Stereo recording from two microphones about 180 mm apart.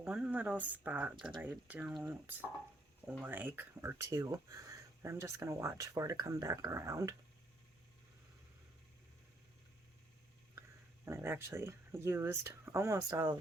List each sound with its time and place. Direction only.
0.0 s speech: 5° right (ahead or behind)
11.0 s speech: 15° right (ahead or behind)